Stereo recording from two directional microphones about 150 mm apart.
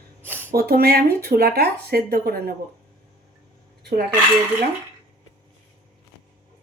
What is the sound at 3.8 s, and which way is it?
Dishes, 90° right.